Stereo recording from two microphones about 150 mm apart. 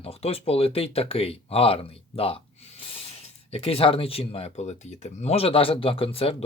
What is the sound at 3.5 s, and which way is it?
Speech, 40° left (ahead or behind).